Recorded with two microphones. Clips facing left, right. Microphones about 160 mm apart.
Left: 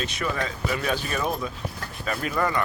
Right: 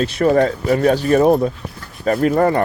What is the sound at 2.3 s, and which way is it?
Speech, 40° right (ahead or behind).